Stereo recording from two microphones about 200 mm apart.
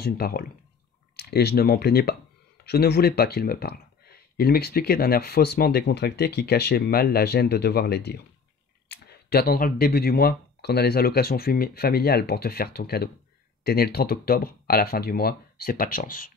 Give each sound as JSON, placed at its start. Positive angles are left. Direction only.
{"t": 0.0, "sound": "speech", "side_deg": 50}